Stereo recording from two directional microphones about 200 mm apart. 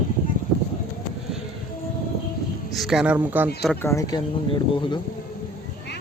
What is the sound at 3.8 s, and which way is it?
Speech, 15° left (ahead or behind).